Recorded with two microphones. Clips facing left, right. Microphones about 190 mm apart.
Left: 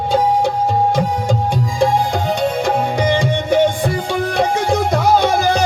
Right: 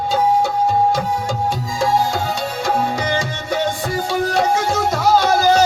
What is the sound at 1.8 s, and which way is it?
Music, 55° left (ahead or behind).